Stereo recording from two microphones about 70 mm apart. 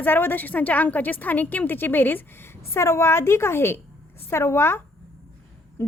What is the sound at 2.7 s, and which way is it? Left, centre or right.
A woman's voice, left.